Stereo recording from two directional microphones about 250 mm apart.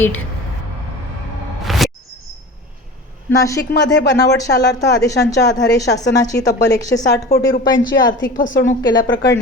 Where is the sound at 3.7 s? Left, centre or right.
Left.